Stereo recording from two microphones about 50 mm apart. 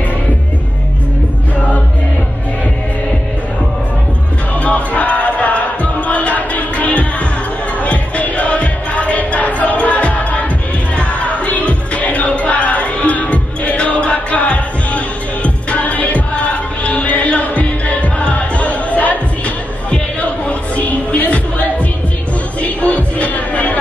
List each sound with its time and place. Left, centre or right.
4.6 s music: left